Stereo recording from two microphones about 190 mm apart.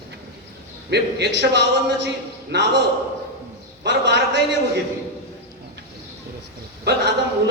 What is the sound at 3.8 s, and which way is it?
Speech, 65° right (ahead or behind).